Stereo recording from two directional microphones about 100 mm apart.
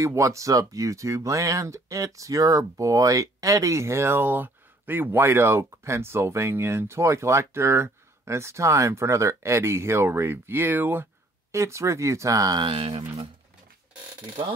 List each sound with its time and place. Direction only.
0.0 s speech: 30° right (ahead or behind)
11.5 s speech: 30° right (ahead or behind)
12.6 s speech: 70° right (ahead or behind)